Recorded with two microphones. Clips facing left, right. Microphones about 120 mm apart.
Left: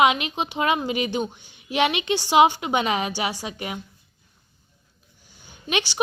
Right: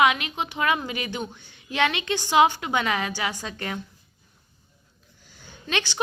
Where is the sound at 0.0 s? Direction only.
20° left (ahead or behind).